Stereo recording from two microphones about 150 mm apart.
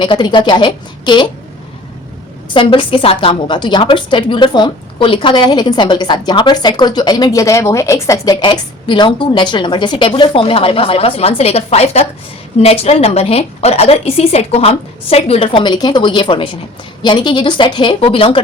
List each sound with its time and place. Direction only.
0.0 s a woman's voice: 30° left (ahead or behind)
2.5 s a woman's voice: 35° left (ahead or behind)